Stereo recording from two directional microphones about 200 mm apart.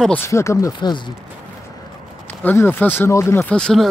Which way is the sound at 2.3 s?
10° left (ahead or behind).